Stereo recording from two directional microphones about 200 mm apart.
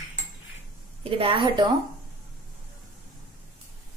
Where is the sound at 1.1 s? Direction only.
25° right (ahead or behind).